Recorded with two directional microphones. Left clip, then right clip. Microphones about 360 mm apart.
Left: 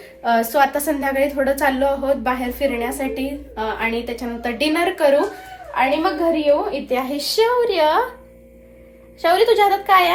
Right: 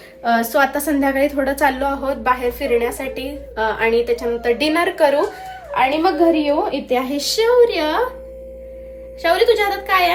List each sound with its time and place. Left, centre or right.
0.2 s a woman's voice: centre
9.2 s a child's voice: centre